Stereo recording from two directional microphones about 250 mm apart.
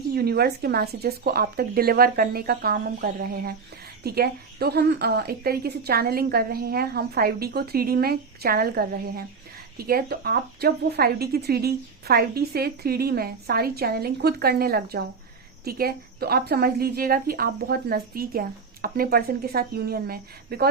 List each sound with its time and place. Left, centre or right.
0.1 s a woman's voice: right